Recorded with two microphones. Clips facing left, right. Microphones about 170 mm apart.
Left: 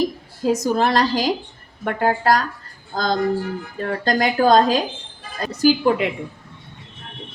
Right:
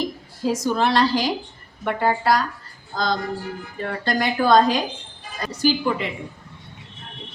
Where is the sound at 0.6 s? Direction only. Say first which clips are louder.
Right 1 dB; 45° left (ahead or behind).